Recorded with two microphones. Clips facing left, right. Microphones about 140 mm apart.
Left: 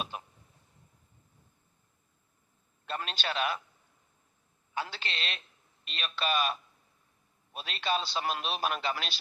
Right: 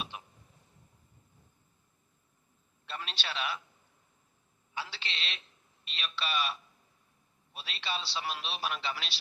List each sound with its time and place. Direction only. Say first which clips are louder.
0.1 s a sound: left 4 dB; 45° left (ahead or behind)
2.8 s a man's voice: left 5 dB; 45° left (ahead or behind)
4.7 s a man's voice: left 4 dB; 50° left (ahead or behind)